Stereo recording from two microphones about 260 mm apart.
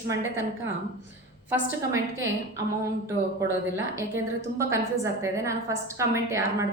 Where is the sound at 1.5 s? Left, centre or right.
Centre.